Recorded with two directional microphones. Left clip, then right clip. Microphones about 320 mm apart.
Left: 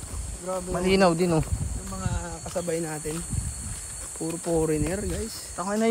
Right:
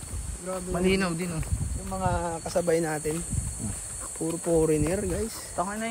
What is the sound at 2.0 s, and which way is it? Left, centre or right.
Speech, right.